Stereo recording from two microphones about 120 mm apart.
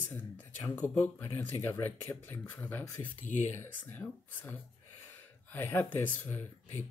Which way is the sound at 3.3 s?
85° left.